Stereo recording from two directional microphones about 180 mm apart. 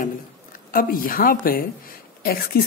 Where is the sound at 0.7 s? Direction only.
50° left (ahead or behind).